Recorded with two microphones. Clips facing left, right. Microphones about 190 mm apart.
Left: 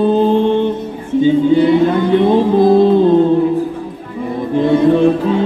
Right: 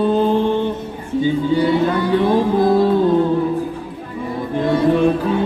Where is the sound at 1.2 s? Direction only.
20° left (ahead or behind).